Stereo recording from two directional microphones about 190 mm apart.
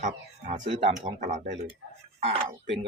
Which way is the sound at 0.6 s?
30° right (ahead or behind).